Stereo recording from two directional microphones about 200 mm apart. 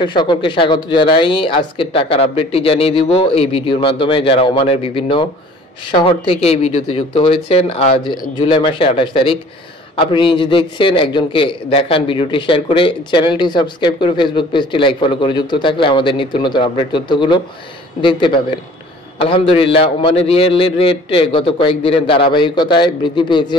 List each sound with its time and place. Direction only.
0.0 s a man's voice: 25° left (ahead or behind)